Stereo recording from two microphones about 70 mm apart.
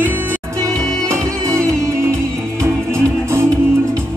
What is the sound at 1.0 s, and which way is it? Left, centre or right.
Music, right.